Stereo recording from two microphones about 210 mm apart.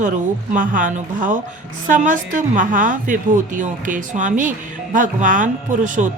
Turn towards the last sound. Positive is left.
turn(degrees=-40)  # may be behind; listen again after turning